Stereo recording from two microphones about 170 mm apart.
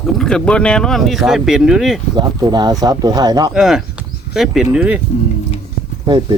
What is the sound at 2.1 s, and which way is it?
Speech, 25° right (ahead or behind).